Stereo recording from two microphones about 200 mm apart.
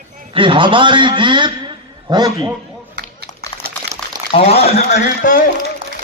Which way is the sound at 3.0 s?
55° right (ahead or behind).